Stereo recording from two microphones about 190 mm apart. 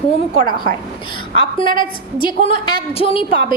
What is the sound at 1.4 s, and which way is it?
A woman's voice, 25° left (ahead or behind).